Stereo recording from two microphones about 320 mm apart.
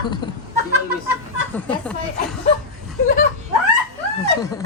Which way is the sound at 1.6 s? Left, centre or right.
Centre.